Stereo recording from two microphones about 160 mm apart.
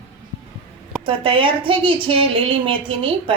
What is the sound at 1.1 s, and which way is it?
A woman's voice, 30° right (ahead or behind).